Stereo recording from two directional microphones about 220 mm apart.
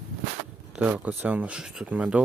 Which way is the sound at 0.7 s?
5° right (ahead or behind).